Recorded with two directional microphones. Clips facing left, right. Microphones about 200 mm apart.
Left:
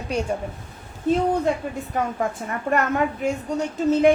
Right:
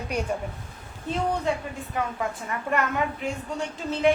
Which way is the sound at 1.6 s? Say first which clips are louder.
Left 4 dB; 45° left (ahead or behind).